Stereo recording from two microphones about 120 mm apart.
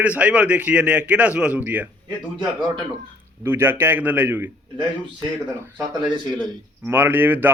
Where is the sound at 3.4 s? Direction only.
20° right (ahead or behind).